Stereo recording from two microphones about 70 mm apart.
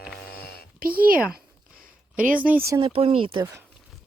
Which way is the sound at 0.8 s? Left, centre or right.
Right.